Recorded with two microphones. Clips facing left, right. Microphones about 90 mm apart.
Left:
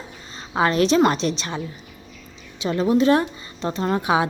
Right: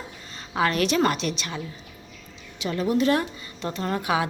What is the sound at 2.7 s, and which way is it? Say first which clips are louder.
A woman's voice: left 5 dB; 25° left (ahead or behind).